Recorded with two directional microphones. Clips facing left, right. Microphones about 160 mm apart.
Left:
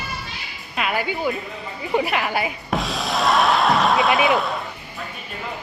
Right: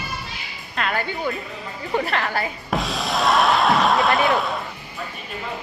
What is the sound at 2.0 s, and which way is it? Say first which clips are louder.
Speech: left 2 dB; 10° left (ahead or behind).